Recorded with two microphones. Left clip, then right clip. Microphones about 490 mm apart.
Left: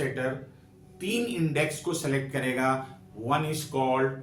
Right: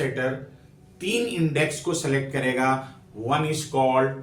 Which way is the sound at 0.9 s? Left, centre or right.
Left.